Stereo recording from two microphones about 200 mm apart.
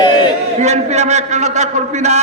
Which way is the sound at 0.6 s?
35° right (ahead or behind).